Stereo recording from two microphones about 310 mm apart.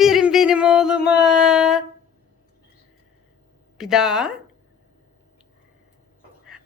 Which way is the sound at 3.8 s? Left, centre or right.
Centre.